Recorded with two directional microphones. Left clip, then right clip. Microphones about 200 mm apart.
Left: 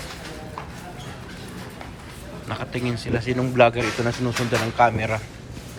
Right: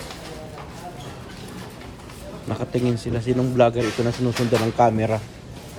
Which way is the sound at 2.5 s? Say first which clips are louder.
Right 4 dB; 30° right (ahead or behind).